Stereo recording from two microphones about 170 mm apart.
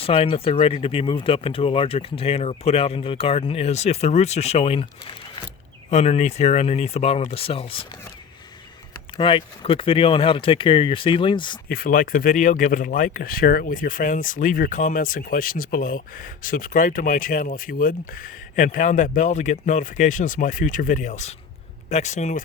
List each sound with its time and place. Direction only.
0.0 s speech: 35° left (ahead or behind)
5.9 s speech: 40° left (ahead or behind)
9.1 s speech: 30° left (ahead or behind)
11.7 s speech: 60° left (ahead or behind)